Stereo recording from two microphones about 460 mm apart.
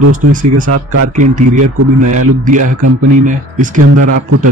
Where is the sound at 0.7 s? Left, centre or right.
Right.